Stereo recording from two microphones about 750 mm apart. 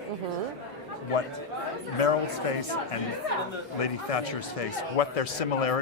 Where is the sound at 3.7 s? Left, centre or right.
Left.